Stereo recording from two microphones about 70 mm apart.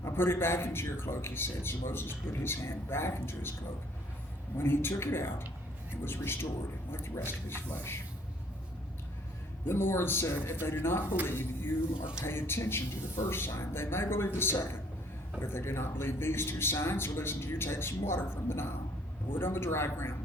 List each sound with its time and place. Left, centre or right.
0.0 s speech: left
4.5 s speech: left
9.6 s speech: left